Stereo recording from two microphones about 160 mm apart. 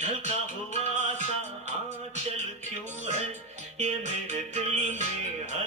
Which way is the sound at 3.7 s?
45° right (ahead or behind).